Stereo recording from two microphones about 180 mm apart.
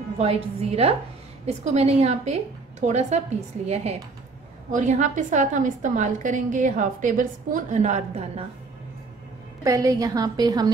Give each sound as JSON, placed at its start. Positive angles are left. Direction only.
{"t": 0.2, "sound": "a woman's voice", "side_deg": -35}
{"t": 9.6, "sound": "a woman's voice", "side_deg": -20}